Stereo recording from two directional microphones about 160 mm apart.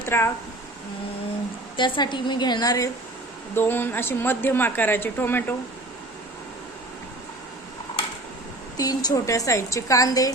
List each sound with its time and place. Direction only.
0.0 s speech: 15° left (ahead or behind)
1.7 s a woman's voice: 30° left (ahead or behind); by 5.5 s 15° left (ahead or behind)
8.8 s a woman's voice: 25° left (ahead or behind)